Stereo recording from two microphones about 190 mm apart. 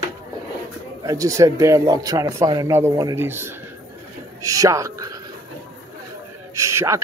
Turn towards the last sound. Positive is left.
turn(degrees=-15)  # may be behind; listen again after turning